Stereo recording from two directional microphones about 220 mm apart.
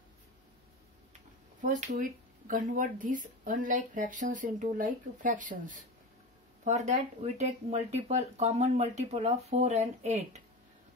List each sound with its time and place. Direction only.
1.6 s speech: 35° right (ahead or behind)